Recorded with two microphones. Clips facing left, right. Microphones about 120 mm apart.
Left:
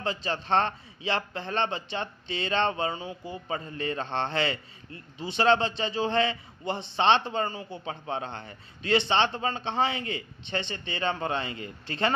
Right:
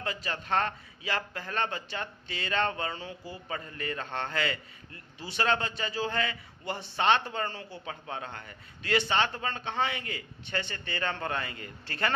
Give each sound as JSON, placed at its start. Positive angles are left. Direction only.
{"t": 0.0, "sound": "a man's voice", "side_deg": 25}